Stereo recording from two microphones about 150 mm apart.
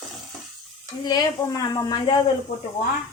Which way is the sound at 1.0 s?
25° left (ahead or behind).